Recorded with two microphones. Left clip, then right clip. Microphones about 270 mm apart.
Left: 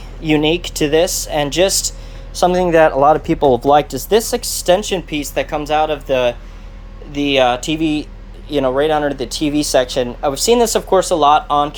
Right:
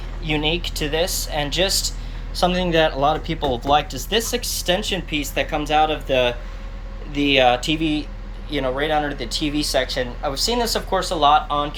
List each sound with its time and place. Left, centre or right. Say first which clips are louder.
0.3 s speech: left 7 dB; left